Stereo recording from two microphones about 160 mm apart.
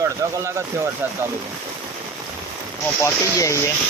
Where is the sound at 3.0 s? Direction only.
20° left (ahead or behind).